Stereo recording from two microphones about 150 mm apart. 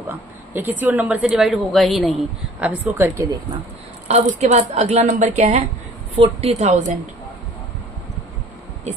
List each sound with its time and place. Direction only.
0.0 s a woman's voice: 10° right (ahead or behind)
2.6 s speech: 10° right (ahead or behind)
4.1 s a woman's voice: 50° right (ahead or behind)
6.1 s a woman's voice: 40° right (ahead or behind)